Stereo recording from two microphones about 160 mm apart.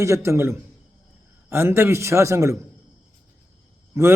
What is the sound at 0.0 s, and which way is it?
A man's voice, 20° right (ahead or behind).